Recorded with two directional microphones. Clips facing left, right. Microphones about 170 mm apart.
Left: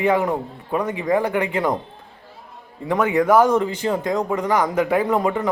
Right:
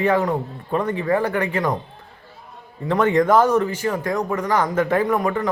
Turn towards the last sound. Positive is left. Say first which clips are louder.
# even
turn(degrees=15)  # may be behind; listen again after turning